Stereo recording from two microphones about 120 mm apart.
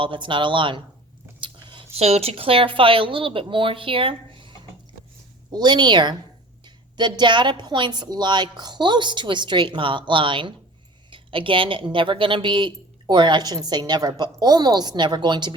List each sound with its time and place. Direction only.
0.0 s a woman's voice: 45° right (ahead or behind)
1.4 s a sound: 45° right (ahead or behind)
2.0 s a woman's voice: 60° right (ahead or behind); by 15.5 s 40° right (ahead or behind)